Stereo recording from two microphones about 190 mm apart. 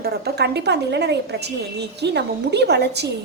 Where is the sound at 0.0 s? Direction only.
60° right (ahead or behind).